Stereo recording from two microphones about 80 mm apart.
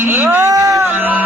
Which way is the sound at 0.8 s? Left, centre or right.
Right.